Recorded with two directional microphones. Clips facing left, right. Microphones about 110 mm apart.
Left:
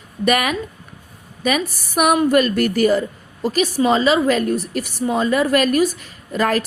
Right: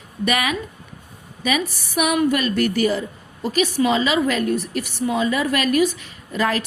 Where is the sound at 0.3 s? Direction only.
45° left (ahead or behind).